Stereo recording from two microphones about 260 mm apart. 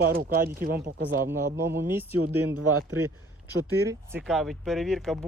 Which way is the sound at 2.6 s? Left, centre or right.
Right.